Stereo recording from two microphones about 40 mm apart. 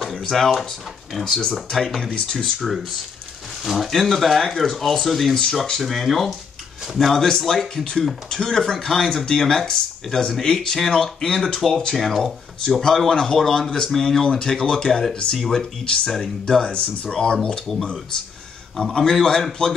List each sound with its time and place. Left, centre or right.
0.0 s speech: centre
2.0 s speech: left
3.6 s speech: centre
7.2 s speech: centre
12.0 s speech: centre
12.8 s speech: centre
14.2 s speech: centre
16.6 s speech: left
18.8 s speech: centre